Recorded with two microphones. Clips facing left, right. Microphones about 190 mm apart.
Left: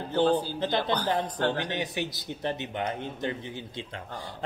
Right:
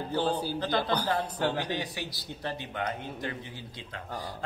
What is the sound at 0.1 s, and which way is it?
Speech, 10° right (ahead or behind).